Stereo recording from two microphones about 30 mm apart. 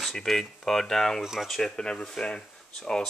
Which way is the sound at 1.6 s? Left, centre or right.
Left.